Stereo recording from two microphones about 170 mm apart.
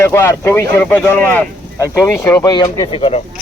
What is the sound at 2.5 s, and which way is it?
Speech, 25° left (ahead or behind).